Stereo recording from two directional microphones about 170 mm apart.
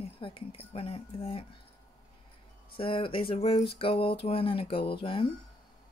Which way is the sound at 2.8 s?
30° left (ahead or behind).